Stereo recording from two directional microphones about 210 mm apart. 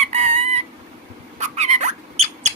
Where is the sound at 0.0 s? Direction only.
30° right (ahead or behind).